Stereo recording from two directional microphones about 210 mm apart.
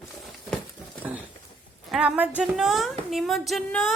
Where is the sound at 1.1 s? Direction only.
10° right (ahead or behind).